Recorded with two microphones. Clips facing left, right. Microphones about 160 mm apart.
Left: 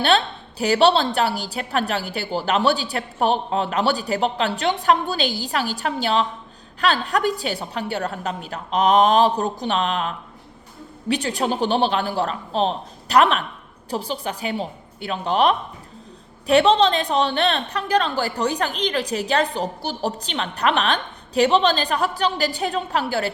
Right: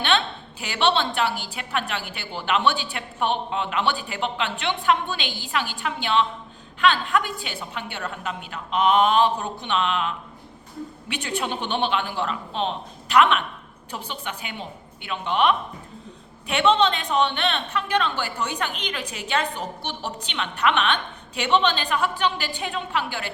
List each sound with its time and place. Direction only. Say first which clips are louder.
0.6 s a woman's voice: left 6 dB; 40° left (ahead or behind)